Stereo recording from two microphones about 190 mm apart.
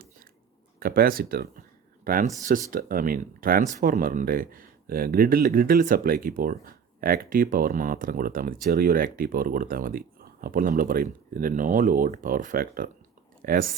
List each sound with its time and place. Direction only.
0.8 s speech: 50° right (ahead or behind)